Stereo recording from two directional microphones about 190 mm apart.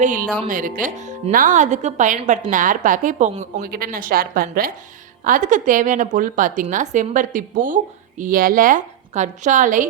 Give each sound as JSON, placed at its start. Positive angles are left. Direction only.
{"t": 0.0, "sound": "speech", "side_deg": -45}